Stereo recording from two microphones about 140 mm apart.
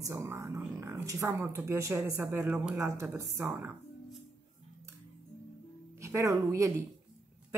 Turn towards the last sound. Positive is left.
turn(degrees=-20)  # may be behind; listen again after turning